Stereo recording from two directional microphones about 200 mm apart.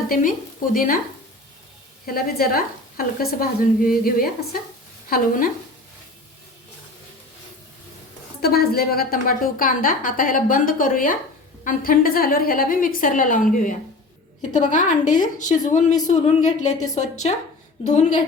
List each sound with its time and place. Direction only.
0.1 s a woman's voice: 45° left (ahead or behind)
2.0 s a woman's voice: 45° left (ahead or behind)
8.4 s a woman's voice: 50° left (ahead or behind); by 17.1 s 35° left (ahead or behind)